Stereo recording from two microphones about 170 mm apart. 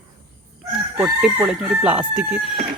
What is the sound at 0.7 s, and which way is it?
Chicken, 5° right (ahead or behind).